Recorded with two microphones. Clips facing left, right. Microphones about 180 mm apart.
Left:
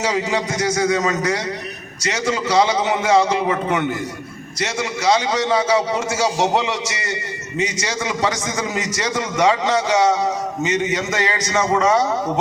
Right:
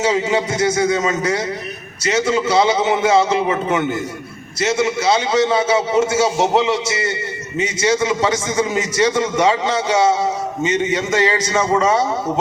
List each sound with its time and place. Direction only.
0.1 s a man's voice: 25° right (ahead or behind)
2.3 s a man's voice: 25° right (ahead or behind)
4.6 s a man's voice: 25° right (ahead or behind)
7.6 s a man's voice: 30° right (ahead or behind)
10.6 s a man's voice: 30° right (ahead or behind)